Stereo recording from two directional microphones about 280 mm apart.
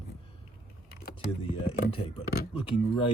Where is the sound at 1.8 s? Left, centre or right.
Centre.